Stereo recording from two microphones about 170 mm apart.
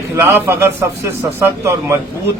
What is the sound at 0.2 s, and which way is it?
A man's voice, 15° right (ahead or behind).